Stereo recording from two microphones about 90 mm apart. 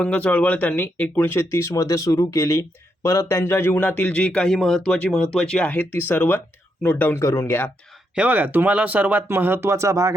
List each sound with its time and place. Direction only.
0.0 s speech: 15° left (ahead or behind)
7.2 s speech: 35° left (ahead or behind)
8.1 s speech: 15° right (ahead or behind); by 10.2 s 35° right (ahead or behind)